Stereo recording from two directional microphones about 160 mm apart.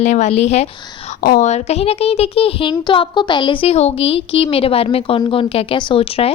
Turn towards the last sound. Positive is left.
turn(degrees=40)  # may be behind; listen again after turning